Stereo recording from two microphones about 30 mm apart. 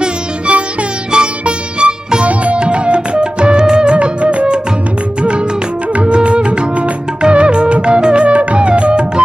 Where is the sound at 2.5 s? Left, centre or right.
Right.